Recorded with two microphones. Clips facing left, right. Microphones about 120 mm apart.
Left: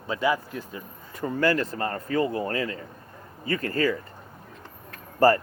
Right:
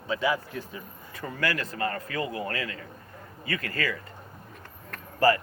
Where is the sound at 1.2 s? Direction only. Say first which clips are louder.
Left 7 dB; 25° left (ahead or behind).